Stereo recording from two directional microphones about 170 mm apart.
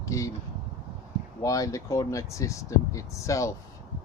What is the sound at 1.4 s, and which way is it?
Speech, 20° left (ahead or behind).